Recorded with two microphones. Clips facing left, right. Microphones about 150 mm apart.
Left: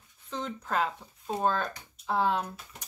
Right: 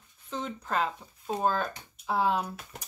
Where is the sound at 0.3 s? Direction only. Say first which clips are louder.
Even; centre (ahead or behind).